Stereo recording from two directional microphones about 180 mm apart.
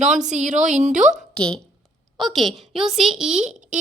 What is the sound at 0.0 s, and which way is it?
Speech, 40° right (ahead or behind).